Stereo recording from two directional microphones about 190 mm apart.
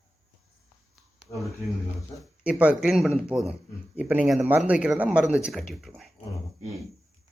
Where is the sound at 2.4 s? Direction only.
5° right (ahead or behind).